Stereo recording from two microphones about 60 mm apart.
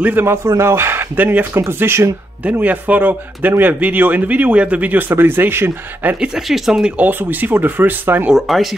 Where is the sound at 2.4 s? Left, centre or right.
Right.